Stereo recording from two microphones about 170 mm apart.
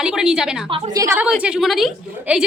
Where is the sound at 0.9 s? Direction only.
20° right (ahead or behind).